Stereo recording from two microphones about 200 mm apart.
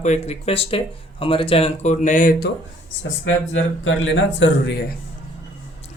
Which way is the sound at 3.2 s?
70° left (ahead or behind).